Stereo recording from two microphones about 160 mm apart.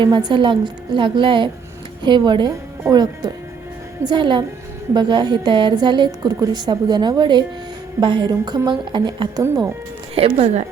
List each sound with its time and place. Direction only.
0.0 s a woman's voice: 30° right (ahead or behind)
10.2 s a woman's voice: 40° right (ahead or behind)